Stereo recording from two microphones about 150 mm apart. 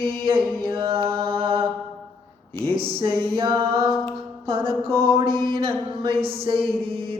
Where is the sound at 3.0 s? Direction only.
35° right (ahead or behind).